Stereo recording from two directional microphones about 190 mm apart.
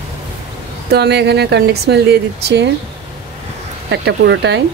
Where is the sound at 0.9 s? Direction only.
60° right (ahead or behind).